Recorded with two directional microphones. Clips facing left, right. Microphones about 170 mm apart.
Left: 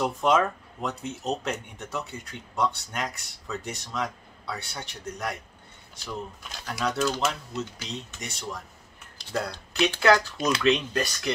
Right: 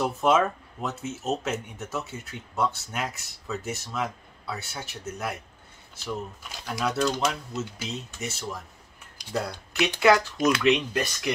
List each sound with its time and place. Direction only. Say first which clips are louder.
0.0 s speech: right 1 dB; 5° right (ahead or behind)
6.6 s speech: right 1 dB; 5° right (ahead or behind)
7.2 s speech: right 1 dB; 5° left (ahead or behind); by 10.2 s 15° right (ahead or behind)
10.3 s speech: right 3 dB; 25° left (ahead or behind)
10.6 s speech: right 1 dB; 10° right (ahead or behind)